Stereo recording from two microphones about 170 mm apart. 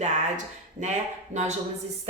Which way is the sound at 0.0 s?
45° right (ahead or behind).